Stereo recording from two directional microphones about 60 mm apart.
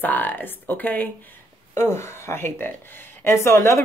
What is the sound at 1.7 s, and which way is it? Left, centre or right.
Speech, left.